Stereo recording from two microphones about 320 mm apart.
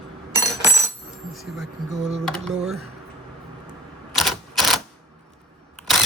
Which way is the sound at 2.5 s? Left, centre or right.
Centre.